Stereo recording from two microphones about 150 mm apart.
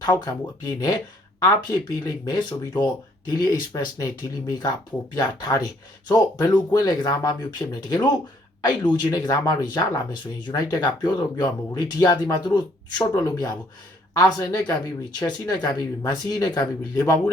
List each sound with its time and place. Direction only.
0.0 s speech: 30° left (ahead or behind)